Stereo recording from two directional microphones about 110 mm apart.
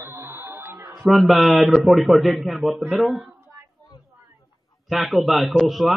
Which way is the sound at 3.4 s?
20° right (ahead or behind).